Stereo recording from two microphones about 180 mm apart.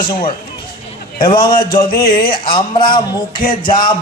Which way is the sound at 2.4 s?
25° left (ahead or behind).